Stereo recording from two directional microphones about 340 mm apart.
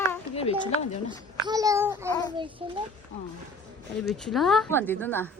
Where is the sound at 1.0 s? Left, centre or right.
Centre.